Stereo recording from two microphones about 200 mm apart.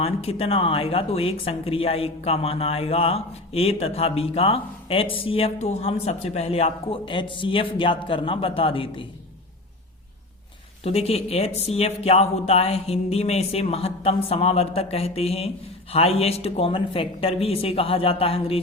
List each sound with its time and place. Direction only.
0.0 s speech: 30° left (ahead or behind)
10.8 s speech: 30° left (ahead or behind)